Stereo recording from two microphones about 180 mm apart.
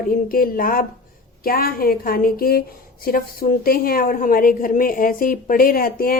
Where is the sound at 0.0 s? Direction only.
50° left (ahead or behind).